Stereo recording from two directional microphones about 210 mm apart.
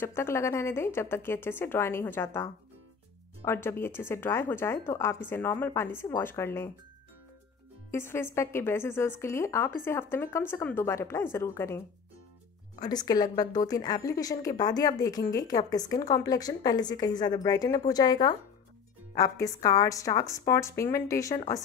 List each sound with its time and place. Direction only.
0.0 s a woman's voice: 10° left (ahead or behind)
7.9 s a woman's voice: 10° left (ahead or behind)
12.8 s a woman's voice: 20° left (ahead or behind)